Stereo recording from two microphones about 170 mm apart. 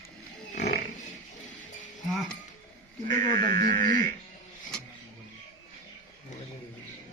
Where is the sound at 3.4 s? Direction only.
50° right (ahead or behind).